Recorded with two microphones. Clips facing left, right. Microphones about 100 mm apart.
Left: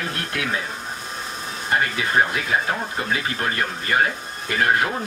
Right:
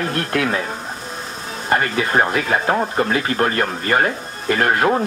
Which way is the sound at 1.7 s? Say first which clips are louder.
Right 4 dB; 55° right (ahead or behind).